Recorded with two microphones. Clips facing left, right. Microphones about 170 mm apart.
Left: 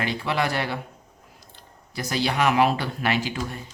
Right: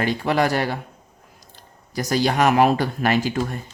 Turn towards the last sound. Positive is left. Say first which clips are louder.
# right 5 dB
turn(degrees=-45)  # may be behind; listen again after turning